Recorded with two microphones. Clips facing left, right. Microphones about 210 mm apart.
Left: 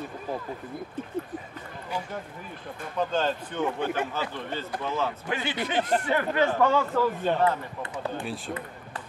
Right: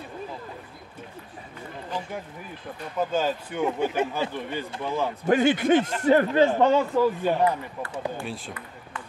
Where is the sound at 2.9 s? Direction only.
10° right (ahead or behind).